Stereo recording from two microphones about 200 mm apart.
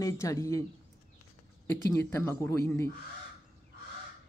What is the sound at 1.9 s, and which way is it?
Speech, 15° left (ahead or behind).